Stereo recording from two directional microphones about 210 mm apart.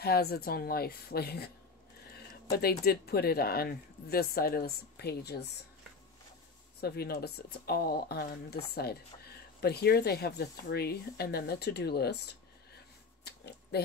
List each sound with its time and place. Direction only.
0.0 s speech: 50° left (ahead or behind)
2.5 s speech: 50° left (ahead or behind)
6.8 s speech: 45° left (ahead or behind)